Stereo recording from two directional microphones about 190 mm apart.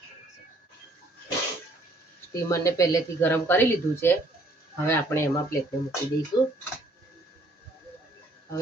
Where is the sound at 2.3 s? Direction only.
15° left (ahead or behind).